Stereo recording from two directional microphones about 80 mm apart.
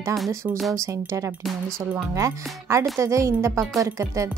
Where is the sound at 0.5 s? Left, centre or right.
Centre.